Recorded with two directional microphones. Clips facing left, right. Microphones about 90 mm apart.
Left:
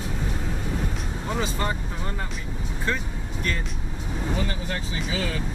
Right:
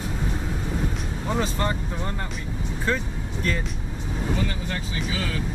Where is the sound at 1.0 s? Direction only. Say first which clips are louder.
Right 2 dB; centre (ahead or behind).